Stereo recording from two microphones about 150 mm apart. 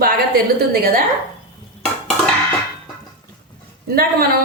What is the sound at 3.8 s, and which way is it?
Speech, 90° right.